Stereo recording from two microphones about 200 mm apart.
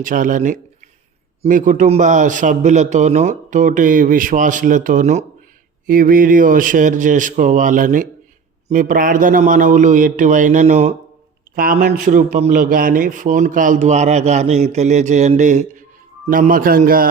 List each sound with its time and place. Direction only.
0.0 s a man's voice: 40° right (ahead or behind)